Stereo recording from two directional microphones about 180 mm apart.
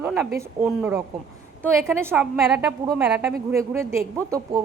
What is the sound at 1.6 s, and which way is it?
Speech, centre (ahead or behind).